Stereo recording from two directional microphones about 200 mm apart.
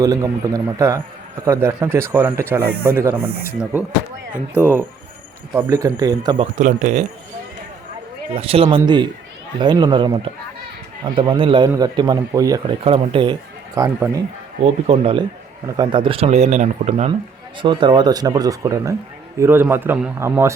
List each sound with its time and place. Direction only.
0.0 s speech: 15° right (ahead or behind)
5.5 s speech: 15° right (ahead or behind)
6.6 s speech: 40° right (ahead or behind)
8.3 s a man's voice: 30° right (ahead or behind)
12.6 s a man's voice: 30° right (ahead or behind)
13.7 s speech: 15° right (ahead or behind)
14.6 s a man's voice: 30° right (ahead or behind)
17.6 s a man's voice: 25° right (ahead or behind)